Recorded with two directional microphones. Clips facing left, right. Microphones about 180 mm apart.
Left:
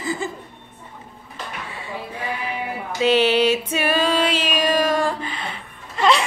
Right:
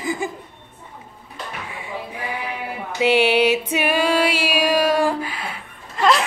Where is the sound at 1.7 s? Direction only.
15° right (ahead or behind).